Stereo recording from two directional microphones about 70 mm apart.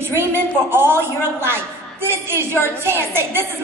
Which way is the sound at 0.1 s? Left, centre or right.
Right.